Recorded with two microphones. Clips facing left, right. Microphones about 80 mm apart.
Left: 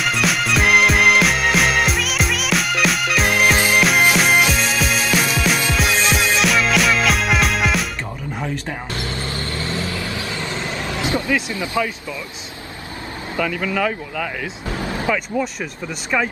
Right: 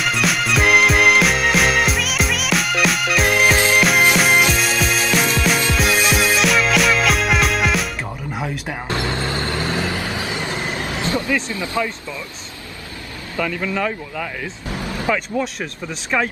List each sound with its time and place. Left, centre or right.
0.0 s music: centre
9.3 s vehicle: right
11.5 s speech: left
13.4 s speech: centre
14.8 s vehicle: left
15.0 s speech: centre